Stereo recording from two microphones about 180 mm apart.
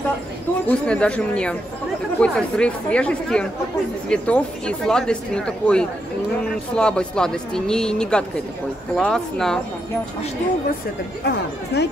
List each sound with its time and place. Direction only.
0.7 s speech: 5° left (ahead or behind)
11.2 s speech: 70° left (ahead or behind)